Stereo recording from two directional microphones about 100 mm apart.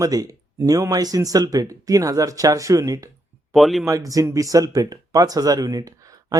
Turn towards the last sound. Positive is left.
turn(degrees=-35)  # may be behind; listen again after turning